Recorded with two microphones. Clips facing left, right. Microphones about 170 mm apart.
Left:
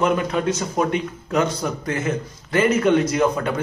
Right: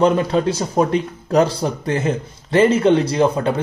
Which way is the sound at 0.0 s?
30° right (ahead or behind).